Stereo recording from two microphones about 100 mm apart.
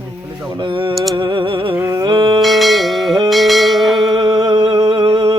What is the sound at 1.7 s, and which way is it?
Speech, 20° right (ahead or behind).